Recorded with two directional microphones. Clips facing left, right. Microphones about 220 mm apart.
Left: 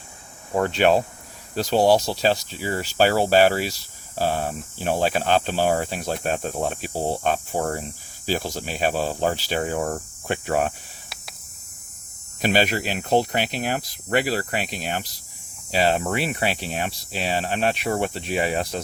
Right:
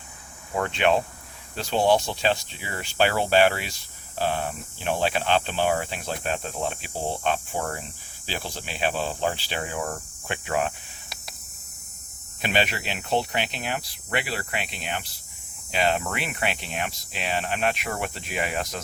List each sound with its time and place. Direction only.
0.5 s speech: 40° left (ahead or behind)
12.4 s speech: 40° left (ahead or behind)